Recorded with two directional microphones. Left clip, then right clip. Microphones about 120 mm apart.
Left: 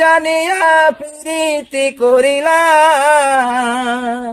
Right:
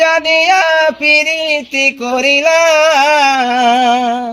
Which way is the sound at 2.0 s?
45° left (ahead or behind).